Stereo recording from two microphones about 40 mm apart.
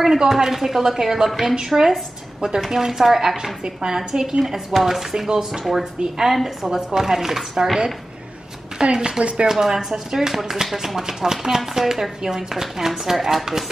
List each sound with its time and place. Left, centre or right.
0.0 s speech: centre
4.6 s a woman's voice: centre
6.7 s speech: centre
8.8 s speech: right